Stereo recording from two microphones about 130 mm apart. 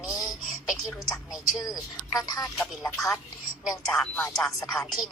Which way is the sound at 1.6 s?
25° left (ahead or behind).